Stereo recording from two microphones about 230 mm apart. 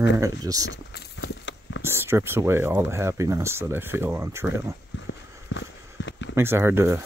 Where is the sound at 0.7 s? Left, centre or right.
Left.